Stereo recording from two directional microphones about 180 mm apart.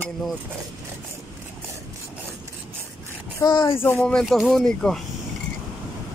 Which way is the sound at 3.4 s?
25° left (ahead or behind).